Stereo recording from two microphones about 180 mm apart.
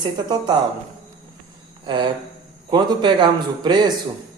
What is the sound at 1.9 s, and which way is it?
Speech, 25° right (ahead or behind).